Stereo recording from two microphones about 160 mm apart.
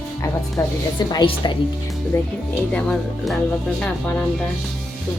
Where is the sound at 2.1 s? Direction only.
15° left (ahead or behind).